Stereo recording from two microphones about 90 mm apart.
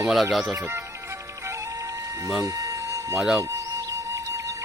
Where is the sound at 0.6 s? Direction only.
30° right (ahead or behind).